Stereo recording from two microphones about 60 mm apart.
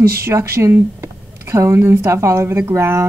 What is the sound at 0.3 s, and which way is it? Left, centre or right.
Speech, right.